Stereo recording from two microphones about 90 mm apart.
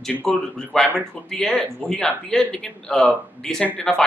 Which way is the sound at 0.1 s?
10° left (ahead or behind).